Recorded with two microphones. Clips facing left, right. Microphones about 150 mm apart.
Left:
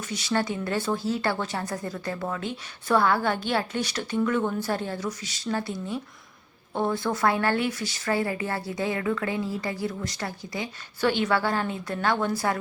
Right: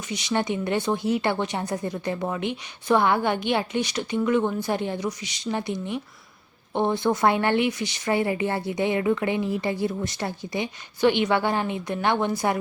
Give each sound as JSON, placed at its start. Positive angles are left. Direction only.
{"t": 0.1, "sound": "a woman's voice", "side_deg": -15}